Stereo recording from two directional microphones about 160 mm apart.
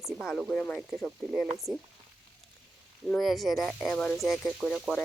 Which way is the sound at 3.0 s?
Centre (ahead or behind).